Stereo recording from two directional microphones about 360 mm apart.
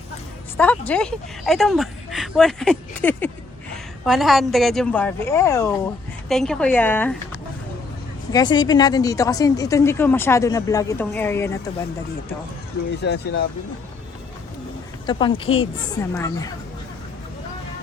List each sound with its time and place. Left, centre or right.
0.5 s speech: centre
8.3 s a woman's voice: centre
13.0 s speech: left
15.0 s a woman's voice: centre